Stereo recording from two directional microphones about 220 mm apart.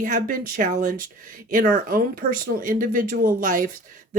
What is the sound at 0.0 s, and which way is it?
A woman's voice, 40° right (ahead or behind).